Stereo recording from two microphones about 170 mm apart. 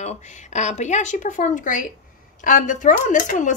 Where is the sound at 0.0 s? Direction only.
40° left (ahead or behind).